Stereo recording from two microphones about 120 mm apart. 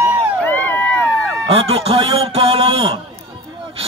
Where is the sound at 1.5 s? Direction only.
55° right (ahead or behind).